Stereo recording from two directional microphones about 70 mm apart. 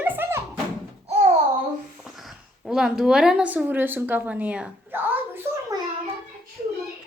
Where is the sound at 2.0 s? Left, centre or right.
Centre.